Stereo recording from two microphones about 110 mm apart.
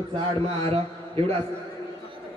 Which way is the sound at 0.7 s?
60° right (ahead or behind).